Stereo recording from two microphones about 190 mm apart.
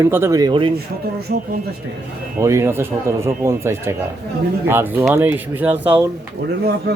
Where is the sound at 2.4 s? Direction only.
15° right (ahead or behind).